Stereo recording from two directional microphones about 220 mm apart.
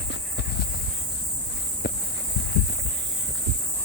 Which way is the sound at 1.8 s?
50° left (ahead or behind).